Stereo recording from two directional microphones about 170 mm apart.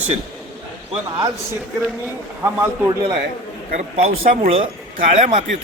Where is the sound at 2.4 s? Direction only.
15° right (ahead or behind).